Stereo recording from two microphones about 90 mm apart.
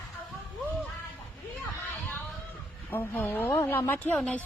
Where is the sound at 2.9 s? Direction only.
20° left (ahead or behind).